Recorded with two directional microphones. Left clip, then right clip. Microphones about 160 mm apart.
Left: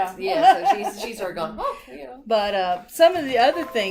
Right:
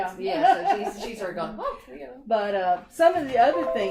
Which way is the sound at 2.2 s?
30° left (ahead or behind).